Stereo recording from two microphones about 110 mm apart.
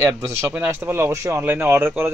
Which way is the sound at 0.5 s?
20° right (ahead or behind).